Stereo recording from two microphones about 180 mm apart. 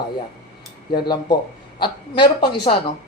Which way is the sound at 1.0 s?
25° left (ahead or behind).